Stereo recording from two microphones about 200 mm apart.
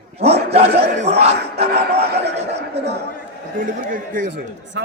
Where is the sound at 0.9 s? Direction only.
35° right (ahead or behind).